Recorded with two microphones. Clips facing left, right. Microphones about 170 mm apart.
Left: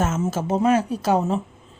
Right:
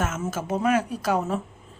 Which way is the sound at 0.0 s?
30° left (ahead or behind).